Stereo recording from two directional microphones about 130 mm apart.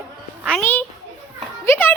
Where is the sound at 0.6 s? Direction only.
15° left (ahead or behind).